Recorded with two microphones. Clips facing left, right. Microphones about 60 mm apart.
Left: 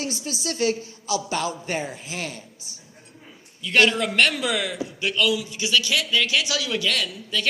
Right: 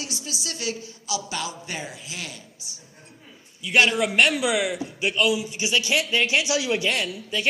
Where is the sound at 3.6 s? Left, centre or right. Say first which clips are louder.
Even; centre.